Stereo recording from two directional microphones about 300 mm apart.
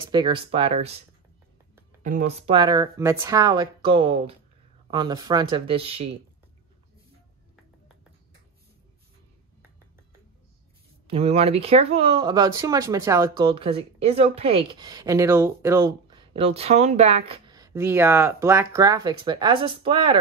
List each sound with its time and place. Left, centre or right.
0.1 s speech: centre
2.0 s speech: right
11.1 s speech: centre